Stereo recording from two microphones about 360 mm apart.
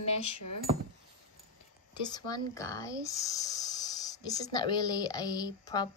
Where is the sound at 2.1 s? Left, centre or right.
Centre.